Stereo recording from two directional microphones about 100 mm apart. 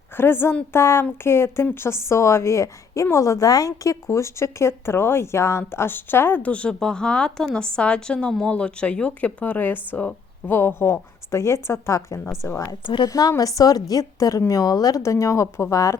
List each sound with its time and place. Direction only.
0.2 s a woman's voice: 20° left (ahead or behind)
12.8 s a woman's voice: 55° left (ahead or behind)
13.1 s a woman's voice: 35° left (ahead or behind)